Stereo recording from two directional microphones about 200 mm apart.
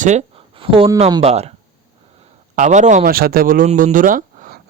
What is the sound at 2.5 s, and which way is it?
Speech, 35° right (ahead or behind).